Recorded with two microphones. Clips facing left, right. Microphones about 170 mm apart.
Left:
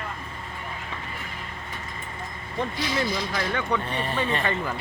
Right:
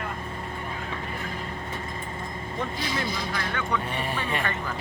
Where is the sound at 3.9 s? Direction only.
10° right (ahead or behind).